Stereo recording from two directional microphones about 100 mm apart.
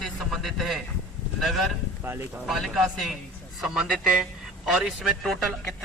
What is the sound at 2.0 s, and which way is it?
Speech, 20° right (ahead or behind).